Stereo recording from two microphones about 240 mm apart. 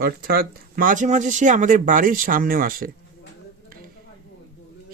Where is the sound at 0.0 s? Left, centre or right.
Right.